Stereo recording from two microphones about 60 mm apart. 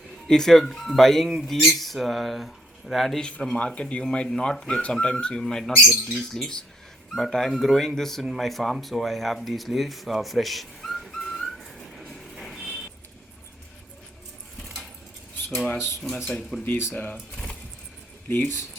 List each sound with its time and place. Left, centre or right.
0.3 s speech: centre
3.2 s speech: centre
16.0 s speech: centre
16.9 s speech: left
17.3 s vehicle: centre
18.3 s speech: left